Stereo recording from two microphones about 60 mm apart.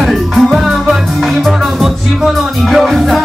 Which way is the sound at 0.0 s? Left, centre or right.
Centre.